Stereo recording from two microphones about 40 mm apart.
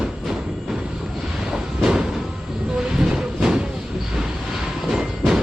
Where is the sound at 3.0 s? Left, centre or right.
Centre.